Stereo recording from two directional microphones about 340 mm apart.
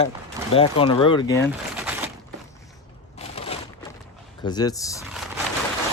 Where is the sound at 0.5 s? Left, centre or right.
Centre.